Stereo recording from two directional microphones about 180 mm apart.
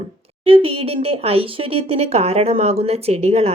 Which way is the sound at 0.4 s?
30° right (ahead or behind).